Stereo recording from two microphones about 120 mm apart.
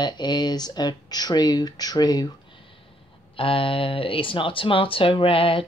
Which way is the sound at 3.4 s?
50° left (ahead or behind).